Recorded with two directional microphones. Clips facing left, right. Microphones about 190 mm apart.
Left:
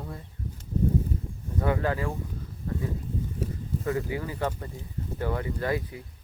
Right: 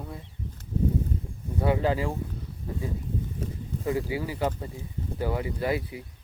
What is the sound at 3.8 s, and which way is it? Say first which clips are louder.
Speech: right 2 dB; 15° right (ahead or behind).